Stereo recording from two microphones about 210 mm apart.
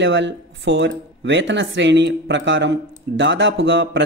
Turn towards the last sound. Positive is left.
turn(degrees=-60)  # may be behind; listen again after turning